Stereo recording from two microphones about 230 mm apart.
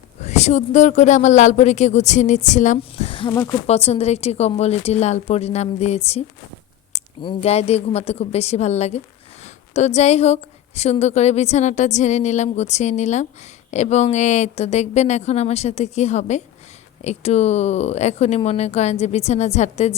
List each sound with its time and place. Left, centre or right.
0.2 s a woman's voice: left